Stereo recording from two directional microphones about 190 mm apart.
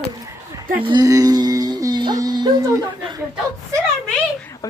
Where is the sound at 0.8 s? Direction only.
20° right (ahead or behind).